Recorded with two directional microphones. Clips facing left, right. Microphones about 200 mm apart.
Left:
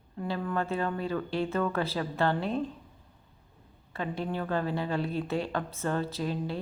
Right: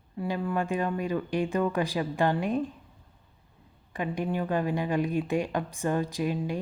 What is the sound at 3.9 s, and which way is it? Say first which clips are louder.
Speech: right 3 dB; 15° right (ahead or behind).